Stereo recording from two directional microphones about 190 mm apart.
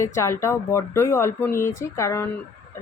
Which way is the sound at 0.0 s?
15° left (ahead or behind).